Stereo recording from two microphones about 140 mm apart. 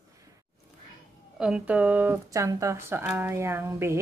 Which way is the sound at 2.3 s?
20° right (ahead or behind).